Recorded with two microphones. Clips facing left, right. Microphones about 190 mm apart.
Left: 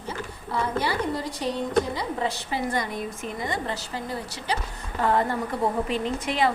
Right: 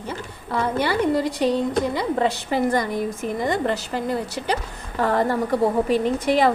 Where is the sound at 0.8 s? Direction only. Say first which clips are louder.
Right 6 dB; 70° right (ahead or behind).